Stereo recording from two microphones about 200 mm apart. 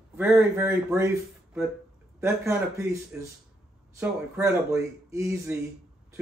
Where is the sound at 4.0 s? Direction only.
15° right (ahead or behind).